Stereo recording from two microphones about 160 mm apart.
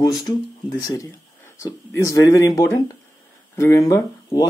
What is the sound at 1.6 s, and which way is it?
Speech, 20° left (ahead or behind).